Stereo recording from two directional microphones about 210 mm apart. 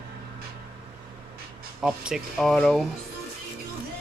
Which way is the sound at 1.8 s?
5° right (ahead or behind).